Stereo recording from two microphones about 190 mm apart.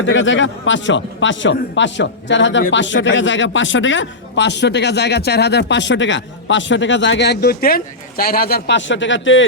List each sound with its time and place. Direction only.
0.0 s a man's voice: 80° left